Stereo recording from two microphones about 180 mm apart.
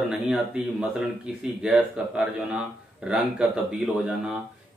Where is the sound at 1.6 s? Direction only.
5° right (ahead or behind).